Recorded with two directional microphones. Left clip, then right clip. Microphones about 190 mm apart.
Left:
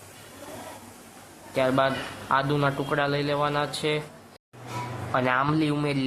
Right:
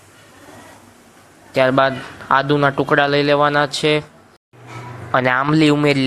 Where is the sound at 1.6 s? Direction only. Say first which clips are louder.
Right 9 dB; 35° right (ahead or behind).